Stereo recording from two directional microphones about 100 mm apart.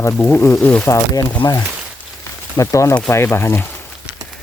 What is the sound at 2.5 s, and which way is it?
Speech, 30° left (ahead or behind).